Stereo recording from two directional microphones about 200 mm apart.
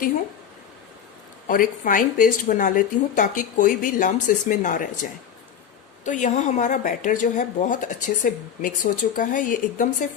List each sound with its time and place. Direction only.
1.5 s speech: 45° left (ahead or behind)
6.1 s speech: 40° left (ahead or behind)